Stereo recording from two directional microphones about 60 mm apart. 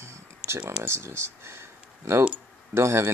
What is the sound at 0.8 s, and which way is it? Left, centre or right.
Speech, right.